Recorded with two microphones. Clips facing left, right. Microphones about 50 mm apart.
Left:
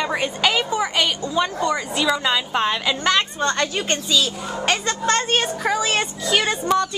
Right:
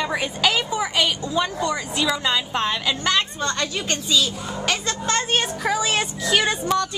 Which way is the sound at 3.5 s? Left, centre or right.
Centre.